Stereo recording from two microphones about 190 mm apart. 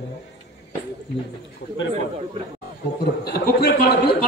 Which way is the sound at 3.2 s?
55° left (ahead or behind).